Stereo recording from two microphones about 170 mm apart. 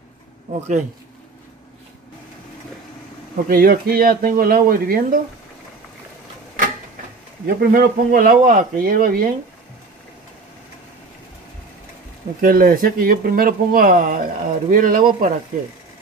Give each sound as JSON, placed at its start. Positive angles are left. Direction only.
{"t": 3.4, "sound": "speech", "side_deg": -60}
{"t": 7.4, "sound": "speech", "side_deg": -60}
{"t": 12.4, "sound": "speech", "side_deg": -55}